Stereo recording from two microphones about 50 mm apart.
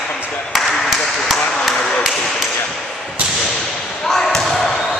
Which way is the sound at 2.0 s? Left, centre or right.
Centre.